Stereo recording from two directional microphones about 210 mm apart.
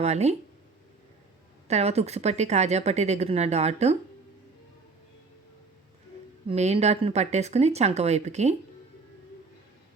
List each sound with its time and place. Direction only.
0.0 s a woman's voice: 30° right (ahead or behind)
1.6 s a woman's voice: 30° right (ahead or behind)
6.5 s a woman's voice: 30° right (ahead or behind)